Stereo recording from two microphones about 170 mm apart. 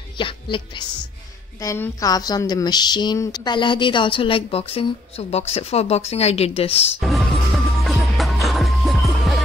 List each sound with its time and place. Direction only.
0.2 s speech: 30° left (ahead or behind)
7.0 s music: centre (ahead or behind)